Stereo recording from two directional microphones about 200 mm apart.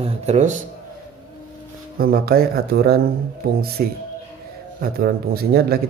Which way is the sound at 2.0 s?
50° right (ahead or behind).